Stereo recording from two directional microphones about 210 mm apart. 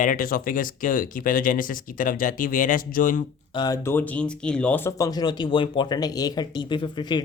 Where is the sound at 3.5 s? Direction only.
15° left (ahead or behind).